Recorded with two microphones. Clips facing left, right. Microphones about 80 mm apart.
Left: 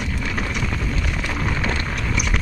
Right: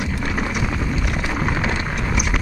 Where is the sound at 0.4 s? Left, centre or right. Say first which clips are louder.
Right 3 dB; centre.